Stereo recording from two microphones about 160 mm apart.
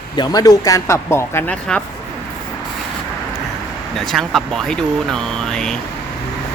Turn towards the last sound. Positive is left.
turn(degrees=5)  # may be behind; listen again after turning